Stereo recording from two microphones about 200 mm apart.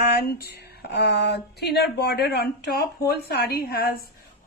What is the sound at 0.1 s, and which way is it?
A woman's voice, 50° left (ahead or behind).